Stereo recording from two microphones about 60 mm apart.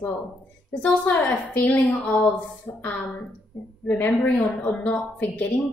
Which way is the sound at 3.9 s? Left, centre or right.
Left.